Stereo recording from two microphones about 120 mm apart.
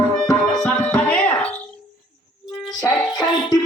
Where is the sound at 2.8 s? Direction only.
35° left (ahead or behind).